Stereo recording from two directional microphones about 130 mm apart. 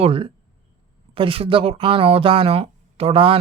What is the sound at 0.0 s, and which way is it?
Speech, 45° right (ahead or behind).